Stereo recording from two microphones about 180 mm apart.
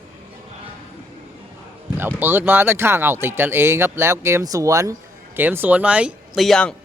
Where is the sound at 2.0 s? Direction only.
10° right (ahead or behind).